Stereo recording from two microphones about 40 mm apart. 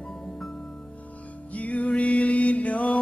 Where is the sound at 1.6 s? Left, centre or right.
Left.